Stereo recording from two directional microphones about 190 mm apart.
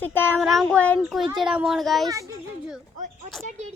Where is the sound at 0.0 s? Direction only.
10° left (ahead or behind).